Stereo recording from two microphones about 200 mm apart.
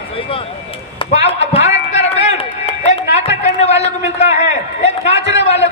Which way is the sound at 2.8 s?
35° left (ahead or behind).